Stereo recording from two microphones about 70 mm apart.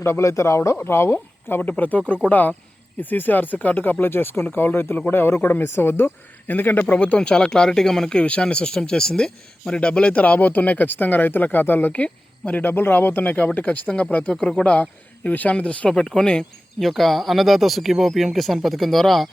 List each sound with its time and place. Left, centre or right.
0.0 s speech: left
0.9 s speech: left; by 15.9 s centre
15.9 s speech: centre